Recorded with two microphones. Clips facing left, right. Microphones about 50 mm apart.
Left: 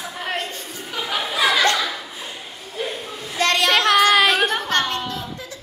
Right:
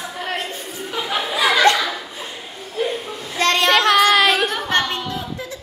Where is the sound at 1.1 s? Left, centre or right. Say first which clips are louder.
Right 1 dB; centre.